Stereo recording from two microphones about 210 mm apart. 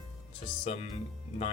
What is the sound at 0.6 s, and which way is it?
Speech, 30° left (ahead or behind).